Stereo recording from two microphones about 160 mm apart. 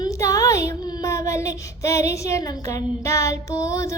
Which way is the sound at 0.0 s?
20° left (ahead or behind).